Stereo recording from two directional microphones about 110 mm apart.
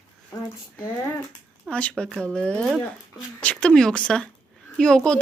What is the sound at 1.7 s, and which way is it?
A woman's voice, 10° left (ahead or behind).